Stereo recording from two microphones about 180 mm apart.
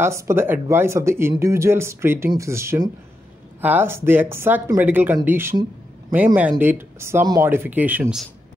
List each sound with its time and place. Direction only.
0.0 s speech: 15° right (ahead or behind)